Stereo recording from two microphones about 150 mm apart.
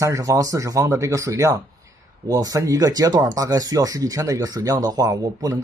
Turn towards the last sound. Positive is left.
turn(degrees=-25)  # may be behind; listen again after turning